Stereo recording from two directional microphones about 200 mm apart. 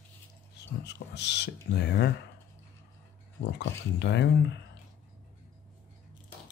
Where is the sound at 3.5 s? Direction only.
60° left (ahead or behind).